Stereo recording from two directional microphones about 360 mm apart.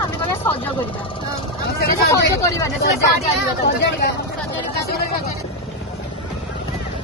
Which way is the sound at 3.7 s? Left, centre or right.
Left.